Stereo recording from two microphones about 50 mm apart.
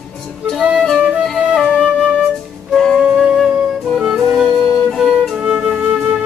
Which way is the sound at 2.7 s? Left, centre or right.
Centre.